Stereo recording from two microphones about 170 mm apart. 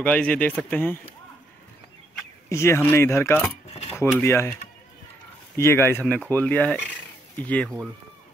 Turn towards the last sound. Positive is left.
turn(degrees=5)  # may be behind; listen again after turning